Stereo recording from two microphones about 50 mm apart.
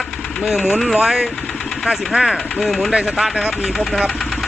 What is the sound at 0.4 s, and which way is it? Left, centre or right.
Speech, centre.